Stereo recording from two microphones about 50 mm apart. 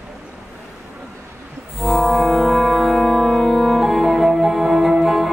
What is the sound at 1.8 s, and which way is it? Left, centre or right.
Brass instrument, centre.